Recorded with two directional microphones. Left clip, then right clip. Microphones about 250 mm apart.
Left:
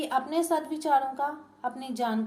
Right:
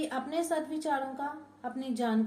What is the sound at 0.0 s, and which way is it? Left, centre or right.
A woman's voice, left.